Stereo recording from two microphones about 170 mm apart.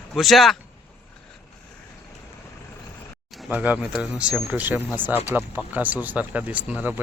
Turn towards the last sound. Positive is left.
turn(degrees=-5)  # may be behind; listen again after turning